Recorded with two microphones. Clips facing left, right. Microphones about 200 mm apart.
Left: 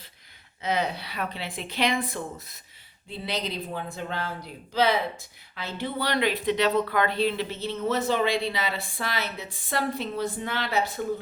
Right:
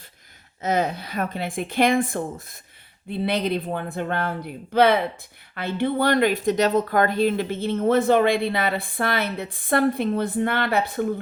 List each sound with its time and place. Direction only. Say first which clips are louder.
0.6 s a woman's voice: right 4 dB; 45° right (ahead or behind)